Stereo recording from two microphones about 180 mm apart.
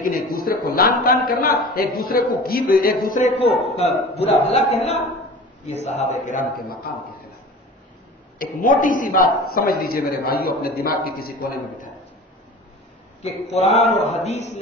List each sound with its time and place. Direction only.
0.0 s a man's voice: 50° left (ahead or behind)
8.4 s a man's voice: 50° left (ahead or behind)
13.6 s a man's voice: 35° left (ahead or behind)